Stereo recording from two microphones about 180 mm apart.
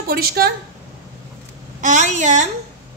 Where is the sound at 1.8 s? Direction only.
45° right (ahead or behind).